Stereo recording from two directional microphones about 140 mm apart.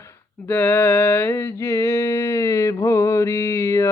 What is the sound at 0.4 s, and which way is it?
Mantra, 15° left (ahead or behind).